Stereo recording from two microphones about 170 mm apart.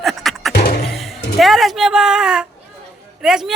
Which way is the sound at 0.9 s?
Centre (ahead or behind).